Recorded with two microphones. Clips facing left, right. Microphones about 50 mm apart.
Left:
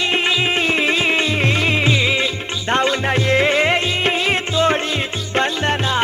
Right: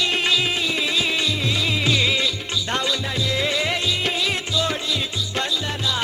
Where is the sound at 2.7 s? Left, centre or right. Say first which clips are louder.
Left 9 dB; left.